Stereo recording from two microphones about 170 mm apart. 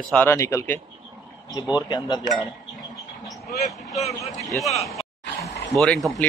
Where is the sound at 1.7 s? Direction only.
25° left (ahead or behind).